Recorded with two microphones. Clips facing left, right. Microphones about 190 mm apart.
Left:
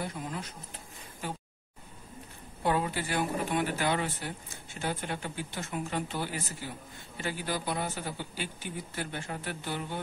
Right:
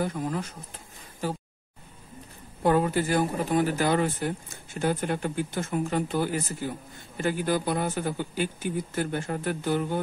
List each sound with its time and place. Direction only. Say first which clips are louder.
0.0 s speech: right 8 dB; 45° right (ahead or behind)
2.6 s speech: right 7 dB; 45° right (ahead or behind)